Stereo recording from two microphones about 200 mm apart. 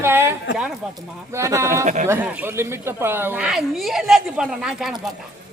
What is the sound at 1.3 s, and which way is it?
Speech, 15° right (ahead or behind).